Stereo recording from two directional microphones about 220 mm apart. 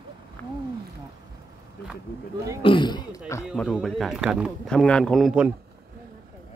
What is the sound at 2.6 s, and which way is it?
Speech, 20° left (ahead or behind).